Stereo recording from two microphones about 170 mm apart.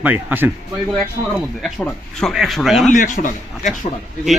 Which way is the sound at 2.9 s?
50° left (ahead or behind).